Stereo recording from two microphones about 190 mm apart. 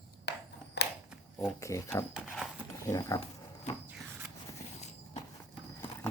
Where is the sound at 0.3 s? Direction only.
65° left (ahead or behind).